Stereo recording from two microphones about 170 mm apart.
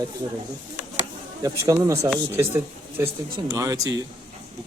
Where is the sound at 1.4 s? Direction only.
15° right (ahead or behind).